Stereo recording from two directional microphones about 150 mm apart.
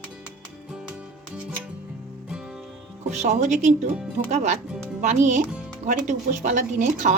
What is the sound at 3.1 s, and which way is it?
Speech, 50° right (ahead or behind).